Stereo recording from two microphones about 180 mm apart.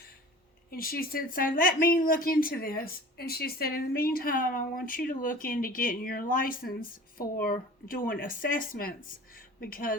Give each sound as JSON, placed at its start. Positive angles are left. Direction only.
{"t": 0.7, "sound": "speech", "side_deg": 55}